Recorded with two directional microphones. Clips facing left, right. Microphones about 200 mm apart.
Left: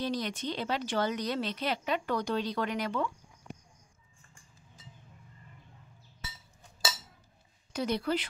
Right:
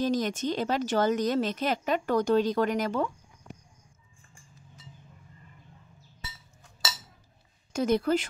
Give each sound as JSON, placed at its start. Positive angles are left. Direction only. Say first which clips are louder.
{"t": 0.0, "sound": "a woman's voice", "louder": "right 6 dB", "side_deg": -45}
{"t": 7.7, "sound": "a woman's voice", "louder": "right 6 dB", "side_deg": -45}